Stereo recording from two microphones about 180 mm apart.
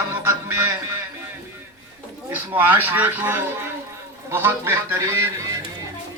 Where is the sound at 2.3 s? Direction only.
10° right (ahead or behind).